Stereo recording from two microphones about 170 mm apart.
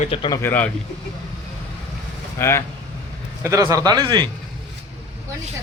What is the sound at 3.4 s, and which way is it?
Speech, 20° right (ahead or behind).